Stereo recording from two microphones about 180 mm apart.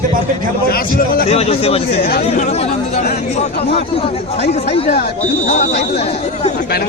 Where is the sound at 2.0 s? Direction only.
60° left (ahead or behind).